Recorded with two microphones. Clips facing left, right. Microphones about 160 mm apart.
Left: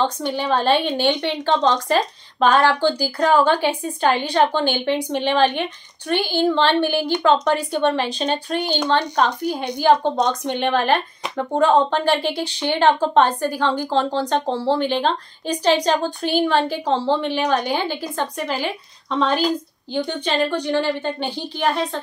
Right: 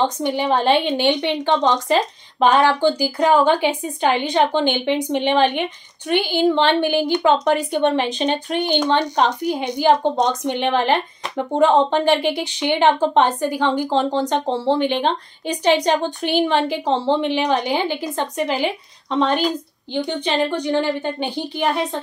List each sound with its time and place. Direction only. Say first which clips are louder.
0.0 s a woman's voice: right 2 dB; 15° right (ahead or behind)